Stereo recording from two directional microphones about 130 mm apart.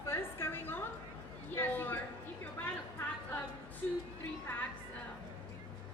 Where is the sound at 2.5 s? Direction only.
15° left (ahead or behind).